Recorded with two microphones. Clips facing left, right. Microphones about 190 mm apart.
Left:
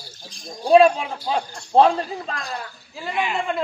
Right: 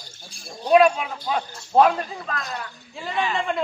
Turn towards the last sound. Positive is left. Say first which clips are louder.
# even
turn(degrees=10)  # may be behind; listen again after turning